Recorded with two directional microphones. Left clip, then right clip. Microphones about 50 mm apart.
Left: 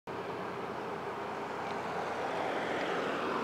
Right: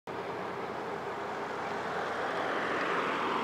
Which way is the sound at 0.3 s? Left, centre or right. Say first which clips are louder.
Right 2 dB; centre.